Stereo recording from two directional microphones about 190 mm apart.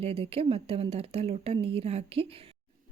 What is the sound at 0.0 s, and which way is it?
Speech, 30° right (ahead or behind).